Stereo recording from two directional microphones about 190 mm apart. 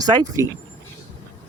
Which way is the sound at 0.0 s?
20° right (ahead or behind).